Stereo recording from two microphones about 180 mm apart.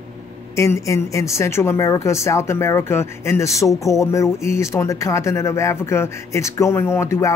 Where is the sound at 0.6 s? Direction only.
15° left (ahead or behind).